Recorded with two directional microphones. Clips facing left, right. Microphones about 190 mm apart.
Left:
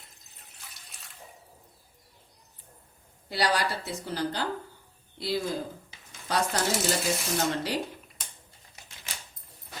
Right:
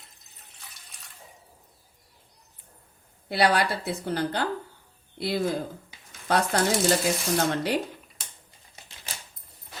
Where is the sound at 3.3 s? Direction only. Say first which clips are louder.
Right 4 dB; 60° right (ahead or behind).